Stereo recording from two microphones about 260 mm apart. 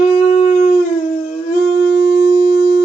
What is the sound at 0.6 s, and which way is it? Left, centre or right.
Howl, left.